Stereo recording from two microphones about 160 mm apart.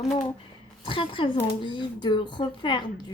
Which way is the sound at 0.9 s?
30° left (ahead or behind).